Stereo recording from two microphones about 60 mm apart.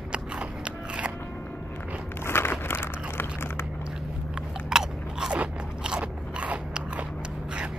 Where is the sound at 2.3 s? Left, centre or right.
Left.